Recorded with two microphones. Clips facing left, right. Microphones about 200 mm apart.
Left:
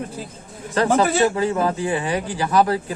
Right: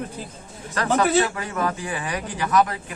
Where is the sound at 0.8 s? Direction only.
30° left (ahead or behind).